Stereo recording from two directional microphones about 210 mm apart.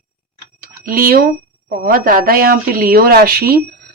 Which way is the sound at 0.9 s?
45° right (ahead or behind).